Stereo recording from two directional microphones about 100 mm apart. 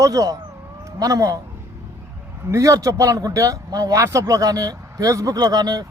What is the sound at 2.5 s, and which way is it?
Speech, 35° right (ahead or behind).